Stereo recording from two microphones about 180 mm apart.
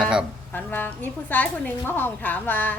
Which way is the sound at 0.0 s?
5° right (ahead or behind).